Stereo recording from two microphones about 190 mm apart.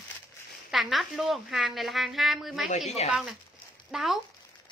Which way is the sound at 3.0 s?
35° left (ahead or behind).